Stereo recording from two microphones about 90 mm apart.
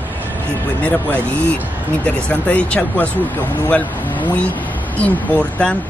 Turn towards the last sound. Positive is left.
turn(degrees=15)  # may be behind; listen again after turning